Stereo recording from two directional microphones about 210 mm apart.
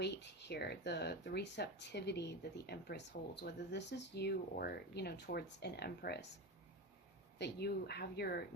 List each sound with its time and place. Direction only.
0.0 s speech: 55° left (ahead or behind)
7.3 s speech: 50° left (ahead or behind)